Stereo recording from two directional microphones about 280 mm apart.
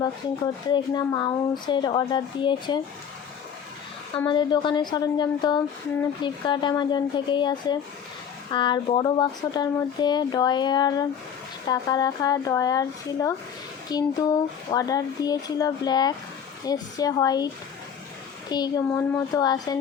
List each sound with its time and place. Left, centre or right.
0.7 s speech: centre
4.2 s speech: centre